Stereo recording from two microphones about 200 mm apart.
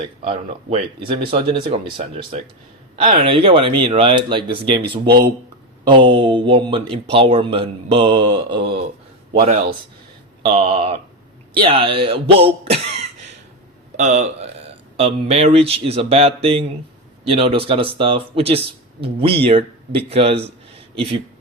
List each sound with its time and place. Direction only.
0.2 s speech: 25° right (ahead or behind)
4.8 s speech: 50° right (ahead or behind)
5.8 s speech: 25° right (ahead or behind)